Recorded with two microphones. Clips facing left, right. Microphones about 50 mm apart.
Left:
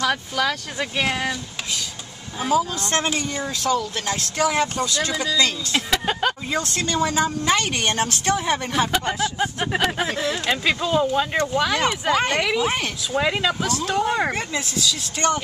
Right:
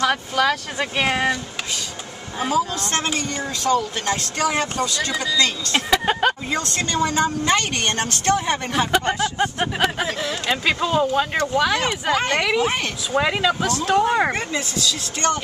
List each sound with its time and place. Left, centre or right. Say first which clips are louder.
0.0 s speech: right 3 dB; centre
2.5 s a woman's voice: left 2 dB; centre
3.4 s a woman's voice: right 4 dB; centre
5.2 s speech: right 1 dB; centre
5.8 s speech: right 4 dB; centre
6.5 s a woman's voice: even; centre
10.6 s a woman's voice: right 2 dB; centre
14.3 s a woman's voice: right 1 dB; centre
15.1 s speech: even; centre